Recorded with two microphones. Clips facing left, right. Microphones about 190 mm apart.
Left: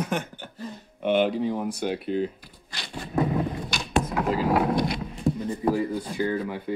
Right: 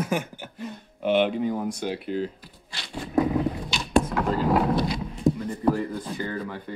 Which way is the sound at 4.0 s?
10° left (ahead or behind).